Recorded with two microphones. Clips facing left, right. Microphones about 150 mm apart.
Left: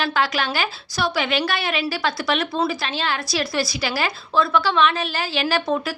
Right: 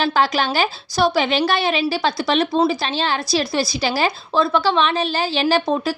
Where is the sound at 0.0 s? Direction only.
30° right (ahead or behind).